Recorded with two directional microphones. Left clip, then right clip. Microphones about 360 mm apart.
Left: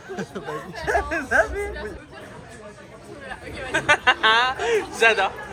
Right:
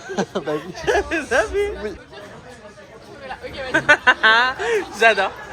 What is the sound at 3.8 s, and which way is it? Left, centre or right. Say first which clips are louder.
Speech: right 4 dB; centre.